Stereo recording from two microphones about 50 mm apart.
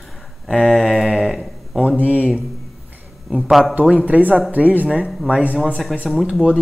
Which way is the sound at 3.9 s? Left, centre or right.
Right.